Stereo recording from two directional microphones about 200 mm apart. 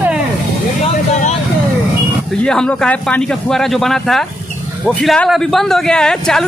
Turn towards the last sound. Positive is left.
turn(degrees=5)  # may be behind; listen again after turning